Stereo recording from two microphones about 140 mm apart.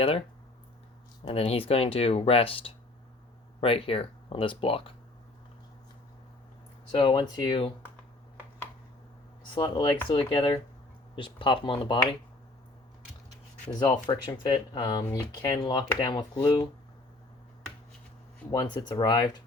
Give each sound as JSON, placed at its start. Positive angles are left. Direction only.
{"t": 1.3, "sound": "speech", "side_deg": 45}
{"t": 6.9, "sound": "speech", "side_deg": 35}
{"t": 9.5, "sound": "speech", "side_deg": 35}
{"t": 14.3, "sound": "speech", "side_deg": 35}
{"t": 18.5, "sound": "speech", "side_deg": 30}